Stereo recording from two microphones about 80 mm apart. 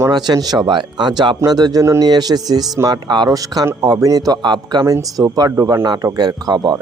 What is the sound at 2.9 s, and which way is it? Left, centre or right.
Speech, right.